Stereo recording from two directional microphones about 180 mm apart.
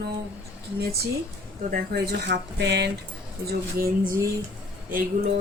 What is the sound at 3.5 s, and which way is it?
Speech, 55° right (ahead or behind).